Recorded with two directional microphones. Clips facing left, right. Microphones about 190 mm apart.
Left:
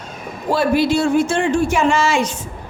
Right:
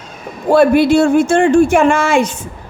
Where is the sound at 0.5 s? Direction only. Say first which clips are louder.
Right 7 dB; 55° right (ahead or behind).